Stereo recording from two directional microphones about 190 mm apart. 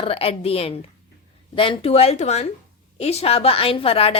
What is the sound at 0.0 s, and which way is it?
A woman's voice, 30° left (ahead or behind).